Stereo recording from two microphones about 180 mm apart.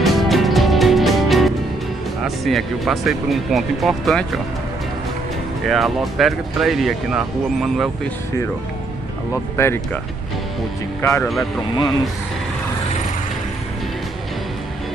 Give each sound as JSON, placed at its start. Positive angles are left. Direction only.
{"t": 0.0, "sound": "music", "side_deg": 0}
{"t": 2.2, "sound": "speech", "side_deg": 0}
{"t": 5.7, "sound": "speech", "side_deg": 0}
{"t": 9.6, "sound": "speech", "side_deg": 15}
{"t": 11.0, "sound": "speech", "side_deg": 15}
{"t": 11.2, "sound": "speech", "side_deg": 0}